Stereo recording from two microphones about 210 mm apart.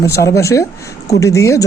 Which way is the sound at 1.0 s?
15° left (ahead or behind).